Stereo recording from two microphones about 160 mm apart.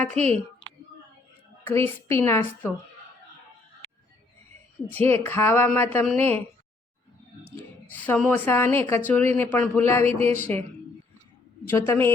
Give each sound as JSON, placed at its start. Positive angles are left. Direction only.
{"t": 0.1, "sound": "a woman's voice", "side_deg": -45}
{"t": 1.6, "sound": "a woman's voice", "side_deg": 15}
{"t": 5.0, "sound": "a woman's voice", "side_deg": 15}
{"t": 7.9, "sound": "a woman's voice", "side_deg": 10}
{"t": 11.7, "sound": "a woman's voice", "side_deg": 15}